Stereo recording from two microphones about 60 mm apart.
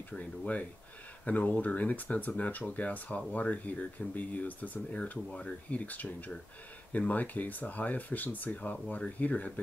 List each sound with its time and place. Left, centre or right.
0.2 s speech: left